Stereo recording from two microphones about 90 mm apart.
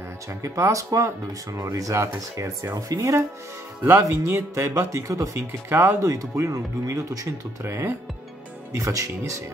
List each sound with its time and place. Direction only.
0.3 s speech: 35° right (ahead or behind)